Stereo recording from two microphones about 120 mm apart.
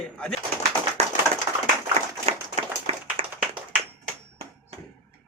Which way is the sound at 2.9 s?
55° right (ahead or behind).